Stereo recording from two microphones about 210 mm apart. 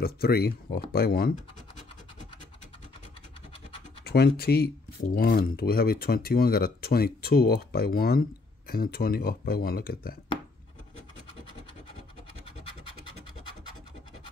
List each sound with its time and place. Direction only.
0.0 s speech: 45° left (ahead or behind)
4.4 s speech: 50° left (ahead or behind)